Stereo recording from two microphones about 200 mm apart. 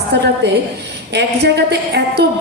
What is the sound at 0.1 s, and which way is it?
A woman's voice, 60° right (ahead or behind).